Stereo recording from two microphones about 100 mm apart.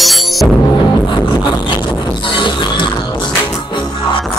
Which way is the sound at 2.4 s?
55° left (ahead or behind).